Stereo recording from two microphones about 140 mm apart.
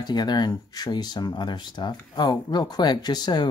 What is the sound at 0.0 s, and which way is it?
Speech, 30° left (ahead or behind).